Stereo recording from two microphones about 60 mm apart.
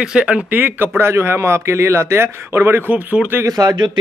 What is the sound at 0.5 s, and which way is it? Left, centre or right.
A man's voice, right.